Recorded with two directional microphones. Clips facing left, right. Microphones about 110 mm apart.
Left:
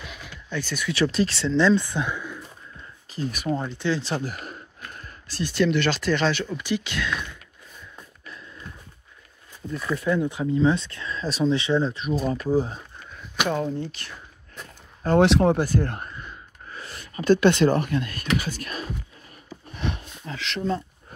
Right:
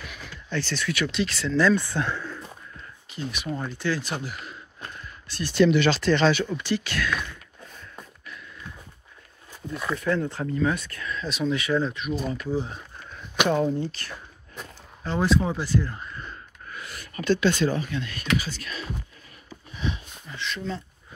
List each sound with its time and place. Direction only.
0.0 s a sound: 20° left (ahead or behind)
0.9 s speech: 35° left (ahead or behind); by 2.4 s 15° left (ahead or behind)
3.1 s speech: 40° left (ahead or behind)
3.4 s speech: 25° left (ahead or behind)
4.2 s speech: 45° left (ahead or behind)
5.5 s speech: centre (ahead or behind)
6.6 s speech: 15° left (ahead or behind)
10.0 s speech: 15° left (ahead or behind); by 12.7 s 40° left (ahead or behind)
13.4 s speech: centre (ahead or behind)
15.1 s speech: 75° left (ahead or behind); by 15.9 s 50° left (ahead or behind)
16.6 s a sound: 30° left (ahead or behind)
17.2 s speech: 55° left (ahead or behind)
19.7 s a sound: 60° left (ahead or behind)